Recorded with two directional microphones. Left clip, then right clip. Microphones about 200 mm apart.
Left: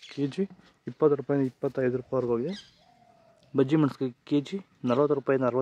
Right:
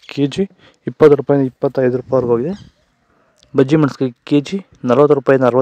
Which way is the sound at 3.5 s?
35° right (ahead or behind).